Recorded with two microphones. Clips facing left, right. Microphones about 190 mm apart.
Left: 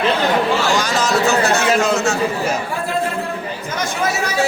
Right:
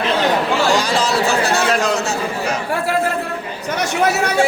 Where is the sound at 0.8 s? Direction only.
30° right (ahead or behind).